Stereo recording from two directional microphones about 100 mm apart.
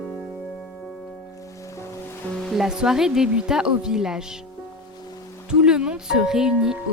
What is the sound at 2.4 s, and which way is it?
Speech, 5° right (ahead or behind).